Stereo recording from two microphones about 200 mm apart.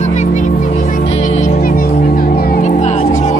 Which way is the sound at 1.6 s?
45° left (ahead or behind).